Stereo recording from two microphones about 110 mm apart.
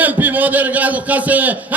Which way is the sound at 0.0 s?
15° right (ahead or behind).